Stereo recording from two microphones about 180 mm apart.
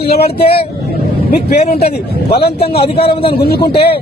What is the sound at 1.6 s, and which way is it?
Speech, 35° left (ahead or behind).